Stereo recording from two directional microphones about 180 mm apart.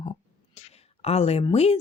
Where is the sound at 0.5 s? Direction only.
35° left (ahead or behind).